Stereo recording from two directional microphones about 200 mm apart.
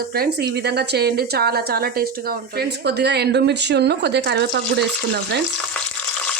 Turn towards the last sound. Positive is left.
turn(degrees=-55)  # may be behind; listen again after turning